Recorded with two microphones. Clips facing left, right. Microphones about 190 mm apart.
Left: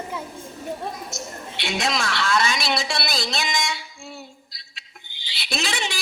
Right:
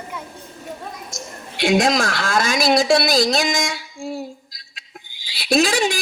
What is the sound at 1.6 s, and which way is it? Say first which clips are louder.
A woman's voice: right 9 dB; 45° right (ahead or behind).